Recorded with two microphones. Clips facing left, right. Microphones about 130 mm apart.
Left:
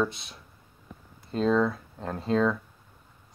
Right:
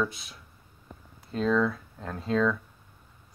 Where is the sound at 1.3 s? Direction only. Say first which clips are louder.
Left 1 dB; 25° left (ahead or behind).